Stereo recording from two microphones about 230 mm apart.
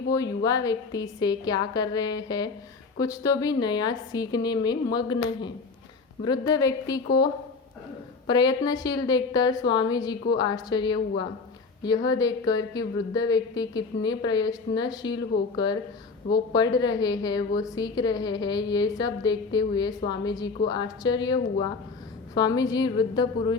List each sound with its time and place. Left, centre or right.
0.1 s speech: centre
8.3 s a woman's voice: centre
22.4 s speech: centre